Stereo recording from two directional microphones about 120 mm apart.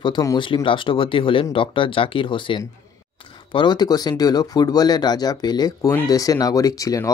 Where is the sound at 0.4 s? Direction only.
45° left (ahead or behind).